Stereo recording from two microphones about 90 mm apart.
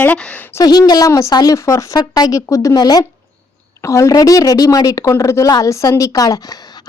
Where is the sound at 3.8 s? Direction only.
35° left (ahead or behind).